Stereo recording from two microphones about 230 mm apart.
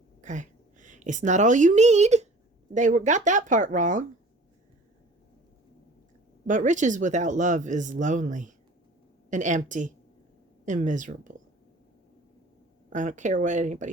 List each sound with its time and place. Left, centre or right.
0.2 s a woman's voice: right
6.5 s speech: right
12.9 s speech: right